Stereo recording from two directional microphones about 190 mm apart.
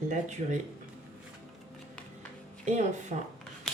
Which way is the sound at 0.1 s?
40° right (ahead or behind).